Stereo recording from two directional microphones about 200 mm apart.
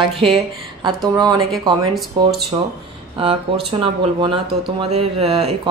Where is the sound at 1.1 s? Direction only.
20° right (ahead or behind).